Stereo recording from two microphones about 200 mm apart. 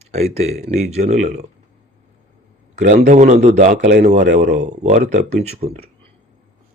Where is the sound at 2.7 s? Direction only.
35° right (ahead or behind).